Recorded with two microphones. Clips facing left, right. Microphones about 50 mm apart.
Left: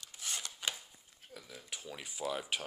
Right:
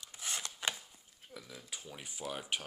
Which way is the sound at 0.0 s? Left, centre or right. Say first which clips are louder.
Right 1 dB; centre.